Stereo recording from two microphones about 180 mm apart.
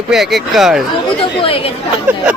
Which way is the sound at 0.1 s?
Centre (ahead or behind).